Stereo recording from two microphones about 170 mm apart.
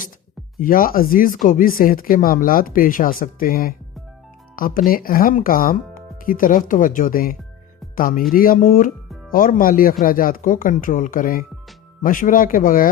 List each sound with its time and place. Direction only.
0.6 s speech: 55° left (ahead or behind)